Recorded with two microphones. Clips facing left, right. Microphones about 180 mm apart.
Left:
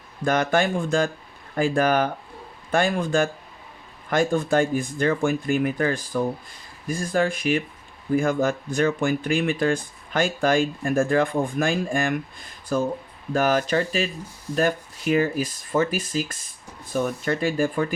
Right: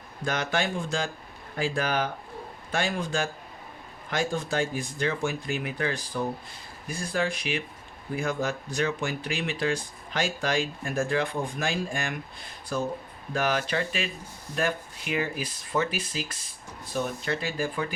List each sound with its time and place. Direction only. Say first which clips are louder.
0.3 s speech: left 7 dB; 50° left (ahead or behind)